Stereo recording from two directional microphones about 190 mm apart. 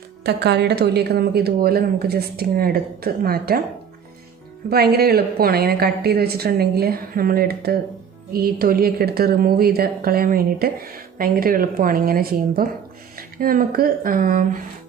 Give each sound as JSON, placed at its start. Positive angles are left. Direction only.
{"t": 0.3, "sound": "speech", "side_deg": -60}
{"t": 4.7, "sound": "a woman's voice", "side_deg": -55}